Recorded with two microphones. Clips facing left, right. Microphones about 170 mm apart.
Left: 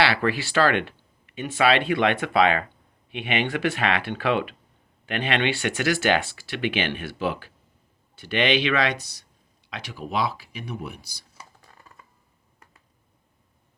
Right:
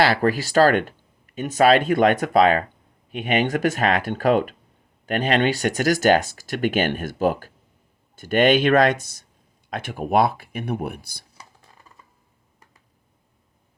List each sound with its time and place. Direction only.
0.0 s speech: 40° right (ahead or behind)